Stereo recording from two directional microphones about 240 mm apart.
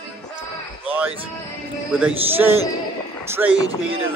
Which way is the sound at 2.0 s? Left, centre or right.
Centre.